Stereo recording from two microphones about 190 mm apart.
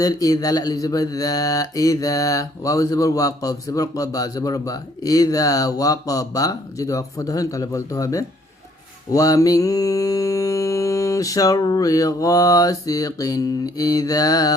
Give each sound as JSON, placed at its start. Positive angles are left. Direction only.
{"t": 0.0, "sound": "mantra", "side_deg": 20}